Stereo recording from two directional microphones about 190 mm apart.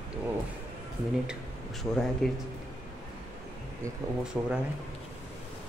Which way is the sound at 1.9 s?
5° left (ahead or behind).